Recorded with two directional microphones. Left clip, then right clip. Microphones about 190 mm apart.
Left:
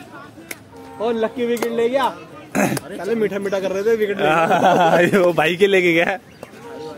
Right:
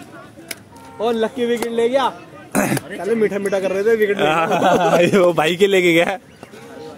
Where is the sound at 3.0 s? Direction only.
40° right (ahead or behind).